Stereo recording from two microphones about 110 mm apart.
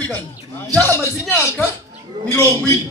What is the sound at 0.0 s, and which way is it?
A man's voice, 15° left (ahead or behind).